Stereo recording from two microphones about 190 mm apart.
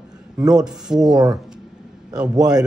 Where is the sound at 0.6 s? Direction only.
5° right (ahead or behind).